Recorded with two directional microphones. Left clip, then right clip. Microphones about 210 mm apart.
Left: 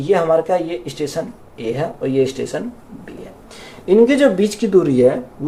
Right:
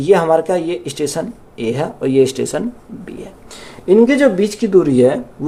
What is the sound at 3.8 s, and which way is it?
Speech, 30° right (ahead or behind).